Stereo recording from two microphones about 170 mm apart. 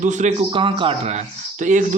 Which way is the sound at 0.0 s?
45° right (ahead or behind).